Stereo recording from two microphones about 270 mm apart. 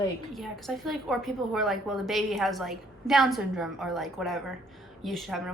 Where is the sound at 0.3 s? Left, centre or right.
Centre.